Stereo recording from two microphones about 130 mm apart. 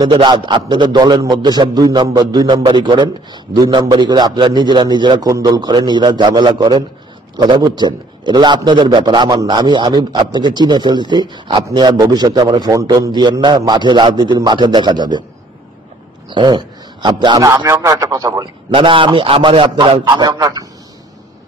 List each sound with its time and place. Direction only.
0.0 s a man's voice: 35° right (ahead or behind)
16.3 s a man's voice: 35° right (ahead or behind)
17.6 s speech: 25° right (ahead or behind)
18.7 s a man's voice: 40° right (ahead or behind)